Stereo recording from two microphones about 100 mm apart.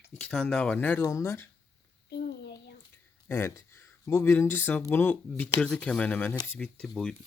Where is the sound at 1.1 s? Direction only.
30° left (ahead or behind).